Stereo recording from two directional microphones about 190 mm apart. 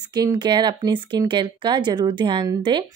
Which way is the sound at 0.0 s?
20° right (ahead or behind).